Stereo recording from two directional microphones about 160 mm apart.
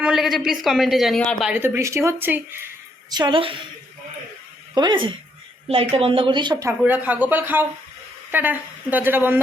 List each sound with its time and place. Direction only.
0.0 s speech: 5° right (ahead or behind)
1.5 s a woman's voice: 10° right (ahead or behind)
3.1 s a woman's voice: 30° right (ahead or behind)
4.7 s a woman's voice: 30° right (ahead or behind); by 9.4 s 15° right (ahead or behind)